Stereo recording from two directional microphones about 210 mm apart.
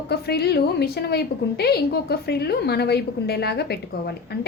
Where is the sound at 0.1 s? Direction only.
50° left (ahead or behind).